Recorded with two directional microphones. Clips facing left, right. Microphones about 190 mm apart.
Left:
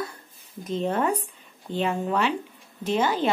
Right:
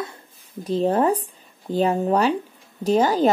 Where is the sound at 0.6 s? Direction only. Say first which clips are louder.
Right 6 dB; 35° right (ahead or behind).